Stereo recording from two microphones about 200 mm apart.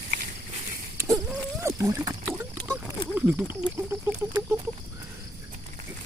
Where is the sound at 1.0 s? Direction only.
15° right (ahead or behind).